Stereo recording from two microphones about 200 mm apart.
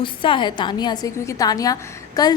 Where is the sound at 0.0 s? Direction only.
25° left (ahead or behind).